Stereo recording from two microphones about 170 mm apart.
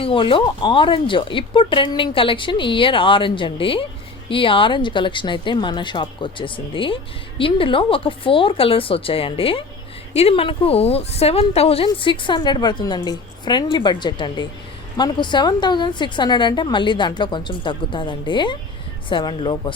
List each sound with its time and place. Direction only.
0.0 s a woman's voice: 30° left (ahead or behind)